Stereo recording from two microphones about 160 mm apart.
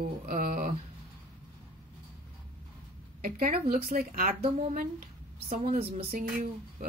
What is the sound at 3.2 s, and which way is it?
Speech, 60° right (ahead or behind).